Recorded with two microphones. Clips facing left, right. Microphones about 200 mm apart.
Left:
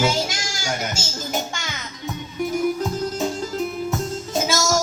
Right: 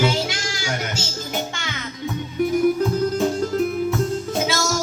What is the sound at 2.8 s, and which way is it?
Music, 60° right (ahead or behind).